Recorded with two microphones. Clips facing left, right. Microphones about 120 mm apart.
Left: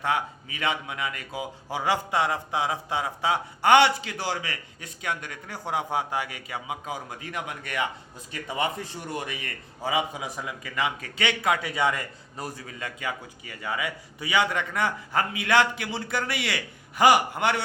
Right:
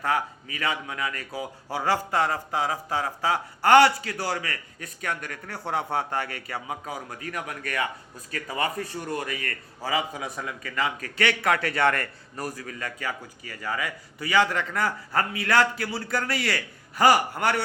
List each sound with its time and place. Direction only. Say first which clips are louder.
0.0 s a man's voice: right 1 dB; 20° left (ahead or behind)
7.2 s a man's voice: right 1 dB; 25° left (ahead or behind)